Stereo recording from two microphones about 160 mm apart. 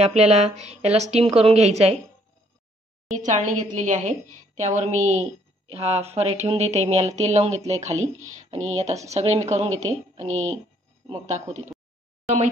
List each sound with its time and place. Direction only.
0.0 s a woman's voice: 40° right (ahead or behind)
3.2 s a woman's voice: 50° right (ahead or behind)